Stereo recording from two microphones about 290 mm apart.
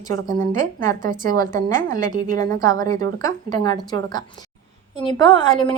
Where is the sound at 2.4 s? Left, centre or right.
Centre.